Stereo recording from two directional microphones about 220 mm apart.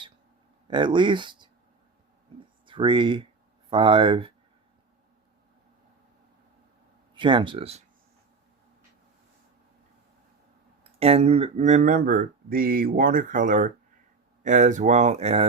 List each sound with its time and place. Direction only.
0.7 s speech: 20° right (ahead or behind)
2.6 s speech: 20° right (ahead or behind)
7.1 s speech: 20° right (ahead or behind)
11.0 s speech: 25° right (ahead or behind)